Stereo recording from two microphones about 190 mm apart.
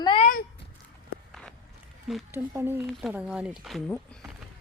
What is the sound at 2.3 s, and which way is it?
Speech, 10° right (ahead or behind).